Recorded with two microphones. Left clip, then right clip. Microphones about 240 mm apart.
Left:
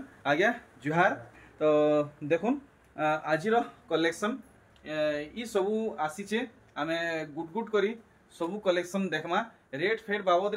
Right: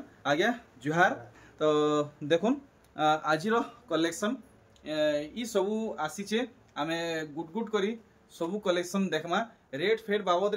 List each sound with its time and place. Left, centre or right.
0.2 s speech: centre